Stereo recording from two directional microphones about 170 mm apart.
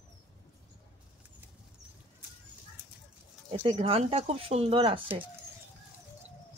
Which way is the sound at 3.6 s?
35° right (ahead or behind).